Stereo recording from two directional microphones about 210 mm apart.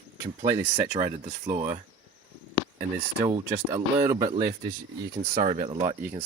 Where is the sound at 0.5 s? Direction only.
40° right (ahead or behind).